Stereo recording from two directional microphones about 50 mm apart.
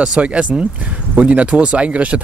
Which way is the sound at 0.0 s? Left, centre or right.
Right.